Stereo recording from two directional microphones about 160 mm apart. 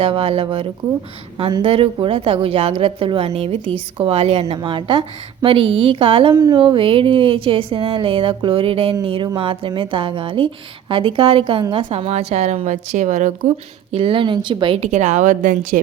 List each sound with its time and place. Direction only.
0.0 s a woman's voice: 35° right (ahead or behind)
13.9 s a woman's voice: 35° right (ahead or behind)
14.8 s a woman's voice: 50° right (ahead or behind)